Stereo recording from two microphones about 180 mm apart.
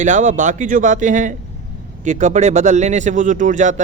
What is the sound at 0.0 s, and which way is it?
Speech, 45° right (ahead or behind).